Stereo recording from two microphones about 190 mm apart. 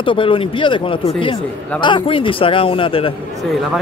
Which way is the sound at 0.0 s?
25° left (ahead or behind).